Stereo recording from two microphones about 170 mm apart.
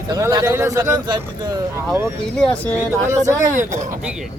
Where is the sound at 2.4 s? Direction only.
5° left (ahead or behind).